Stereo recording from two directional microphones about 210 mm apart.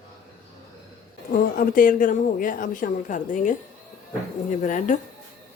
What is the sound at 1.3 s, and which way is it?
A woman's voice, 40° left (ahead or behind).